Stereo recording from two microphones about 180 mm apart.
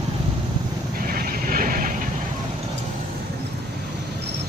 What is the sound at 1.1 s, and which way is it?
Vehicle, 50° right (ahead or behind).